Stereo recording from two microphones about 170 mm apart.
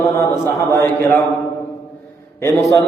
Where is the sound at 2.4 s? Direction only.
20° left (ahead or behind).